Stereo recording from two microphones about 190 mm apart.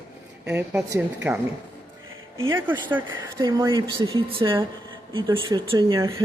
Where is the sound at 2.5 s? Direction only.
10° right (ahead or behind).